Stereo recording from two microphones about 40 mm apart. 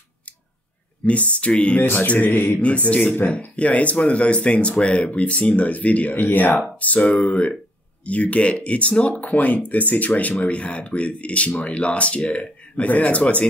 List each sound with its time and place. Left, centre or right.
1.0 s speech: left
1.8 s speech: left
2.0 s speech: left
6.8 s speech: left
9.2 s speech: left
10.4 s speech: left